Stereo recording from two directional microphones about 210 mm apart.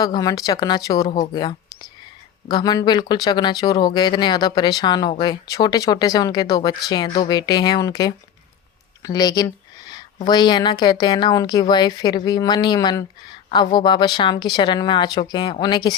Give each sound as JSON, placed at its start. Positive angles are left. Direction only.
{"t": 0.0, "sound": "speech", "side_deg": 15}